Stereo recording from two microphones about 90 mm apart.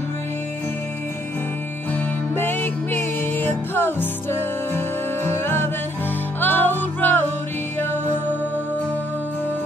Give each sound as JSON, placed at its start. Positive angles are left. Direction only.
{"t": 2.3, "sound": "music", "side_deg": 25}